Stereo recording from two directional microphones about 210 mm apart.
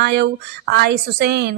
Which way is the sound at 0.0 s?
50° right (ahead or behind).